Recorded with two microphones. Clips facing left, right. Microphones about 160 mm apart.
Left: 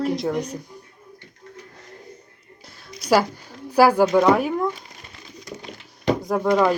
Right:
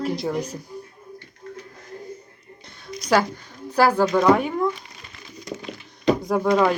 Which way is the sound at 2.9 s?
5° left (ahead or behind).